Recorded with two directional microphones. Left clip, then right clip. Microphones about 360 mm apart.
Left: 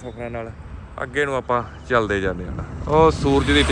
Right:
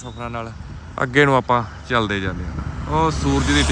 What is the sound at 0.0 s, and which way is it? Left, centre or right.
Speech, centre.